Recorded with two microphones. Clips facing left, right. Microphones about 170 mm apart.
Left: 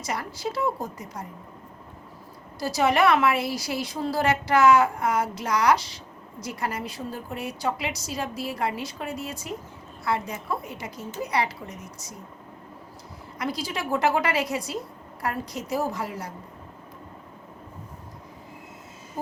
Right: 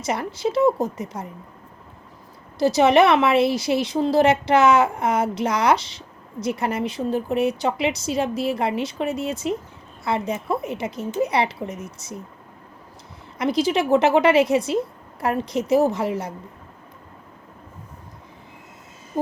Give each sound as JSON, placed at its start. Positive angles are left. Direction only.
{"t": 0.0, "sound": "a woman's voice", "side_deg": -25}
{"t": 2.6, "sound": "a woman's voice", "side_deg": -25}
{"t": 13.4, "sound": "a woman's voice", "side_deg": -20}
{"t": 19.1, "sound": "owl", "side_deg": -25}